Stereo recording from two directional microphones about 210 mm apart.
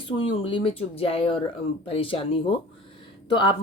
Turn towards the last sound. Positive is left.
turn(degrees=25)  # may be behind; listen again after turning